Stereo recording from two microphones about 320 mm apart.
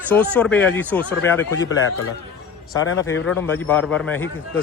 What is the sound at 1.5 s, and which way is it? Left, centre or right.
A man's voice, left.